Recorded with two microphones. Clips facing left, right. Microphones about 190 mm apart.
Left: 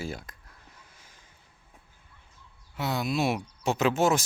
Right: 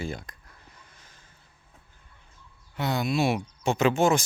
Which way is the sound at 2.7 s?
Centre (ahead or behind).